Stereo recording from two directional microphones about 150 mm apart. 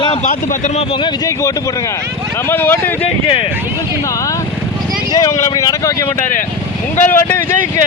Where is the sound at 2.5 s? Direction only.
15° left (ahead or behind).